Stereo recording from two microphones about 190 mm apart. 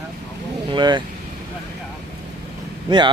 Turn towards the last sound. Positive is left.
turn(degrees=-25)  # may be behind; listen again after turning